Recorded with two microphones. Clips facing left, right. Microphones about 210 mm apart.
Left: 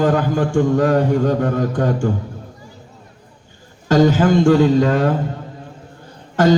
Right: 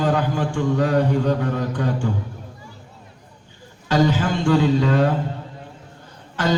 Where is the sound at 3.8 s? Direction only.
45° left (ahead or behind).